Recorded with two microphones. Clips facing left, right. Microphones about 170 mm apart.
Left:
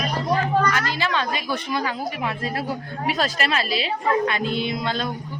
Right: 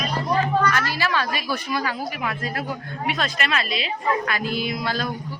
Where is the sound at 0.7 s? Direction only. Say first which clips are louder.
Even; 20° left (ahead or behind).